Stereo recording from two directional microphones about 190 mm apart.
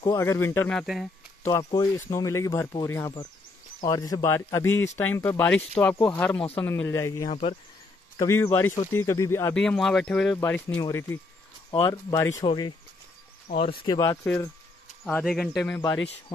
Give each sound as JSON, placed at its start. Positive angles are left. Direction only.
{"t": 0.0, "sound": "speech", "side_deg": 15}
{"t": 0.7, "sound": "speech", "side_deg": 0}
{"t": 1.4, "sound": "speech", "side_deg": 20}
{"t": 7.2, "sound": "speech", "side_deg": 30}
{"t": 8.2, "sound": "speech", "side_deg": 15}
{"t": 9.6, "sound": "speech", "side_deg": 0}
{"t": 11.7, "sound": "speech", "side_deg": 25}
{"t": 12.1, "sound": "speech", "side_deg": 15}
{"t": 13.7, "sound": "speech", "side_deg": 20}
{"t": 15.0, "sound": "speech", "side_deg": 5}
{"t": 16.3, "sound": "speech", "side_deg": 25}